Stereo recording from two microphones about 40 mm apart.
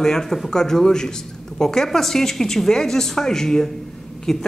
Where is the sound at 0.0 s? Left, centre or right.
Centre.